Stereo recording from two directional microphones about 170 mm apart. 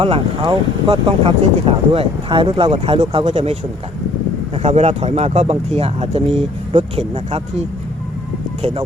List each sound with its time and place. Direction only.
0.0 s speech: 30° right (ahead or behind)